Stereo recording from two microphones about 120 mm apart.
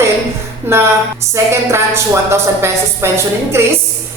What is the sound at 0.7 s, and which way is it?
Speech, 20° right (ahead or behind).